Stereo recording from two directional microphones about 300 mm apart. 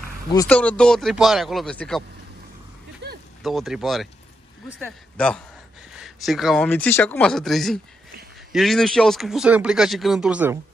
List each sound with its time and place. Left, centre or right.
0.3 s speech: centre
3.4 s speech: centre